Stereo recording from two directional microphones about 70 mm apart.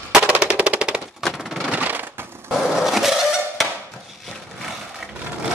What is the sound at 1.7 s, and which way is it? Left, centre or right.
Crushing, right.